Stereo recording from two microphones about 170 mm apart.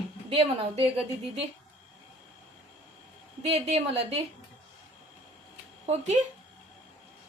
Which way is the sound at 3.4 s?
35° right (ahead or behind).